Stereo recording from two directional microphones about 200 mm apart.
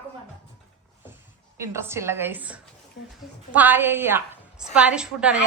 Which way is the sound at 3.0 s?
60° left (ahead or behind).